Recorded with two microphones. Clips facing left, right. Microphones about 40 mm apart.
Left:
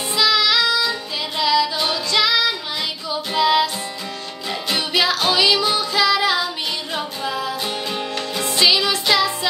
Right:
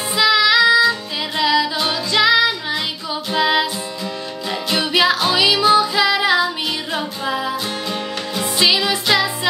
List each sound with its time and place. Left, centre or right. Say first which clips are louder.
0.1 s child singing: right 3 dB; centre
0.7 s music: right 6 dB; centre
4.7 s music: right 4 dB; centre
7.6 s music: right 1 dB; centre